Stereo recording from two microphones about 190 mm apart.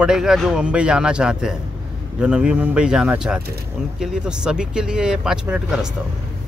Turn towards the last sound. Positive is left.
turn(degrees=-5)  # may be behind; listen again after turning